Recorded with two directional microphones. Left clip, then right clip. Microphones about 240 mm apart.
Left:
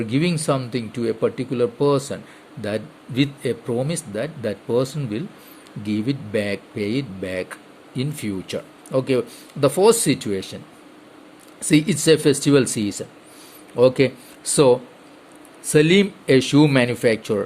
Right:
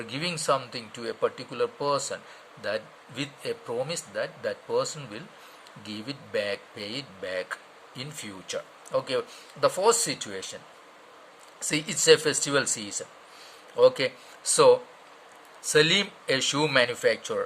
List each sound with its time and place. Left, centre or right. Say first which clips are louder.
0.1 s speech: left 3 dB; centre
11.6 s speech: left 7 dB; centre